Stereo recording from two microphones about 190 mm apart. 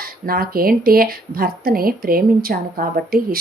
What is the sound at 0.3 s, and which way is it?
A woman's voice, 50° right (ahead or behind).